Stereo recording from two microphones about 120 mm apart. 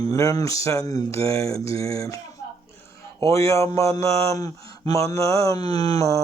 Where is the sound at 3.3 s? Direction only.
25° left (ahead or behind).